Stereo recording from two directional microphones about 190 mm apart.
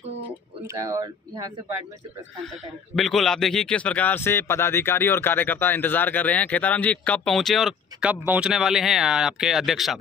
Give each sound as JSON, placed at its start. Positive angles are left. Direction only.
{"t": 0.7, "sound": "speech", "side_deg": -20}
{"t": 3.0, "sound": "a man's voice", "side_deg": 0}